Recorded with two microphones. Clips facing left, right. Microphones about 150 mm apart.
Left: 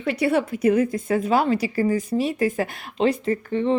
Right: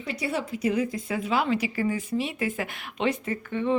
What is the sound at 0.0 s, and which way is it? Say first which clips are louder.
A woman's voice: left 9 dB; 60° left (ahead or behind).